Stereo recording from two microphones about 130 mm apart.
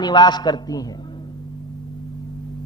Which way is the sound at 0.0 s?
35° left (ahead or behind).